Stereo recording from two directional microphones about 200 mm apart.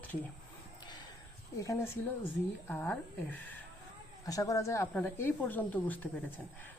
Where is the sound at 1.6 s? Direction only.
15° left (ahead or behind).